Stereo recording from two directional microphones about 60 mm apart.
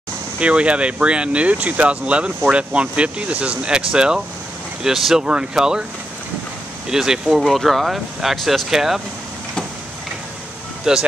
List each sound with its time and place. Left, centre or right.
0.4 s speech: right
6.9 s speech: centre
10.9 s speech: centre